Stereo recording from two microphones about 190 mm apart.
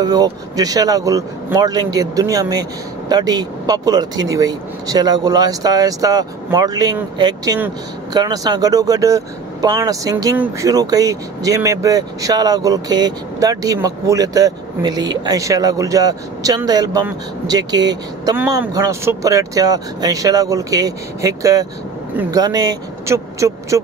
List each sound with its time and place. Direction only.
0.0 s speech: 20° right (ahead or behind)
22.4 s speech: 20° right (ahead or behind)